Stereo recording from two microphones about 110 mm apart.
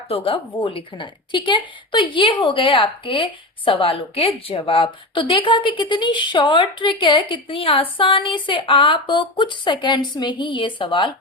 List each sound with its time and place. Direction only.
0.6 s a woman's voice: 50° left (ahead or behind)